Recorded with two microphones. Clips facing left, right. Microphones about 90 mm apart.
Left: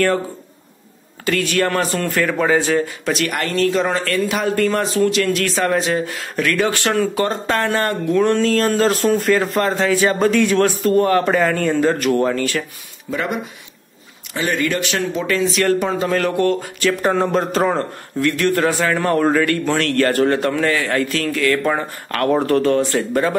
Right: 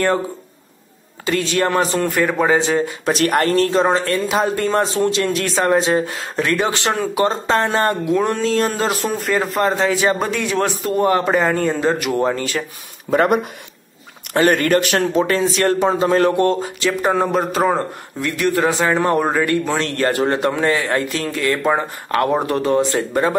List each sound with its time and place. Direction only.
1.2 s speech: 20° right (ahead or behind)
3.1 s speech: 40° right (ahead or behind)
8.0 s a man's voice: 10° right (ahead or behind)
8.9 s speech: 5° right (ahead or behind)
9.6 s a man's voice: 20° right (ahead or behind)
13.1 s speech: 50° right (ahead or behind); by 16.9 s 25° right (ahead or behind)
17.0 s a man's voice: 5° right (ahead or behind); by 23.3 s 20° right (ahead or behind)